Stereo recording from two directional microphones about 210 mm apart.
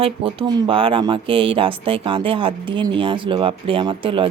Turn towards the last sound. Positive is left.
turn(degrees=-25)  # may be behind; listen again after turning